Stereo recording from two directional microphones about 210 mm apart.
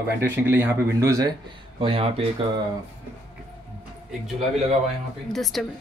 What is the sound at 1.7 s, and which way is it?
Speech, 25° right (ahead or behind).